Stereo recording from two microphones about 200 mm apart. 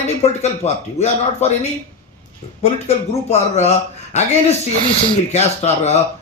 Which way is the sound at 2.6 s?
30° left (ahead or behind).